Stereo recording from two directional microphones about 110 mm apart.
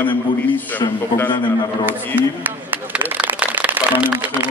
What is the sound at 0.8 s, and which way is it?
Speech, 40° left (ahead or behind).